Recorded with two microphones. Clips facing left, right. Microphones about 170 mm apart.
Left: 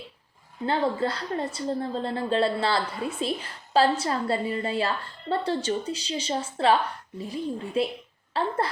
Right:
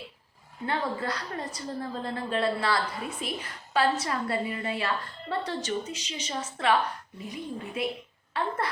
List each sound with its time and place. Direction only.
0.6 s a woman's voice: 30° left (ahead or behind)